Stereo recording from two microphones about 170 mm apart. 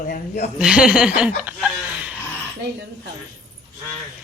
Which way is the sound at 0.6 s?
5° right (ahead or behind).